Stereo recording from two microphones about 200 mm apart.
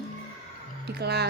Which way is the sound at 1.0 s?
55° right (ahead or behind).